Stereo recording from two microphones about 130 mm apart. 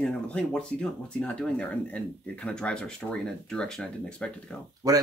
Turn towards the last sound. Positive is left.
turn(degrees=-30)  # may be behind; listen again after turning